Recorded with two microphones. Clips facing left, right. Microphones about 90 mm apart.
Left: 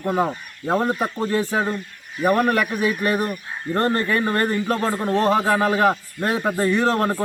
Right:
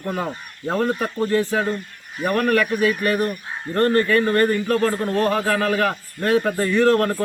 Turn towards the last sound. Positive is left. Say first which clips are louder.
# right 3 dB
turn(degrees=20)  # may be behind; listen again after turning